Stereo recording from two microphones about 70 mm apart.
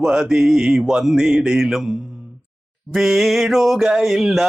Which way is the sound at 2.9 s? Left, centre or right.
Centre.